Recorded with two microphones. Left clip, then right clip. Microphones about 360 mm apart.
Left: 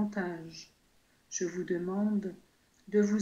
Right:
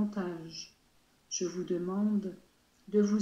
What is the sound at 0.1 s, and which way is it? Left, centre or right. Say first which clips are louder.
Speech: left 1 dB; left.